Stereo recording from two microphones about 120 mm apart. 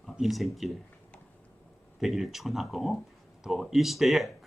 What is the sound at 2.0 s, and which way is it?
Speech, centre (ahead or behind).